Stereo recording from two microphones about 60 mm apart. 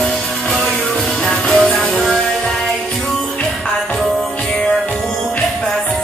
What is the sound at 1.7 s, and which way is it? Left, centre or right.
Music, left.